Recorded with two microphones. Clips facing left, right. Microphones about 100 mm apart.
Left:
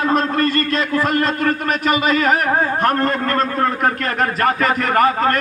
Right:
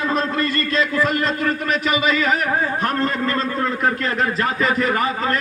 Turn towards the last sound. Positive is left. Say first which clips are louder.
# left 5 dB
turn(degrees=55)  # may be behind; listen again after turning